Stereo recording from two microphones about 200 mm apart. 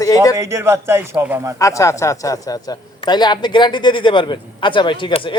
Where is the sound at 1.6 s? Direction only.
15° left (ahead or behind).